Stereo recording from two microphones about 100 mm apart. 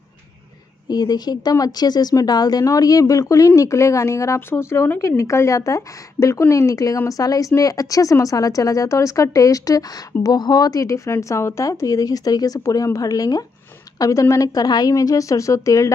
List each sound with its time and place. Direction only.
0.8 s speech: 40° left (ahead or behind)